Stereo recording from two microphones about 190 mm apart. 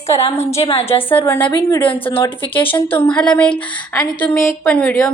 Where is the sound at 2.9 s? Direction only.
10° left (ahead or behind).